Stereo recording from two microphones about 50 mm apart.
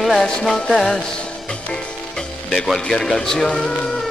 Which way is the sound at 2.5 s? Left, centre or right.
Centre.